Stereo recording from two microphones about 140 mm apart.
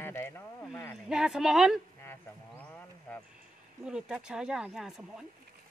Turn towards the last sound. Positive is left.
turn(degrees=-5)  # may be behind; listen again after turning